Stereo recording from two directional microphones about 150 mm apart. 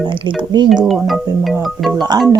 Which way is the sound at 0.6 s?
Centre (ahead or behind).